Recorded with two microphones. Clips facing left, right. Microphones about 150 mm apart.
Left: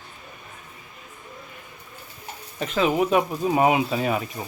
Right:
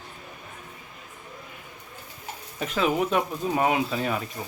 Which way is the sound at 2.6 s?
Centre (ahead or behind).